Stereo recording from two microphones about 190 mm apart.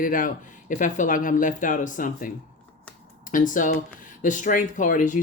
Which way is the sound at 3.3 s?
45° left (ahead or behind).